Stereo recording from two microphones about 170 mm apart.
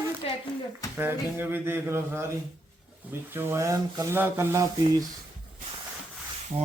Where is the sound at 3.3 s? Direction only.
15° right (ahead or behind).